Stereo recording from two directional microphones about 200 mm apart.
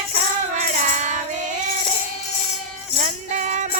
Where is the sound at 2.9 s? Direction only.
40° right (ahead or behind).